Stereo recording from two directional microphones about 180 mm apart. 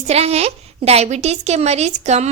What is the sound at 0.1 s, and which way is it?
A woman's voice, 35° right (ahead or behind).